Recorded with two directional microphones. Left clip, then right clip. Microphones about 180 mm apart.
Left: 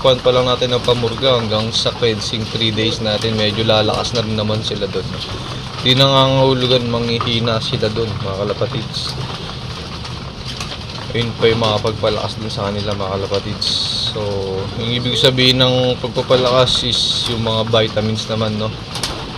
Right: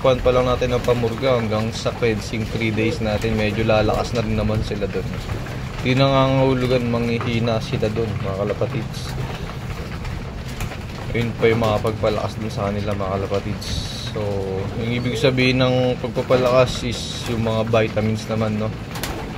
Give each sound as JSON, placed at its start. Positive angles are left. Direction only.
{"t": 0.0, "sound": "speech", "side_deg": -5}
{"t": 5.9, "sound": "speech", "side_deg": -5}
{"t": 11.1, "sound": "speech", "side_deg": -5}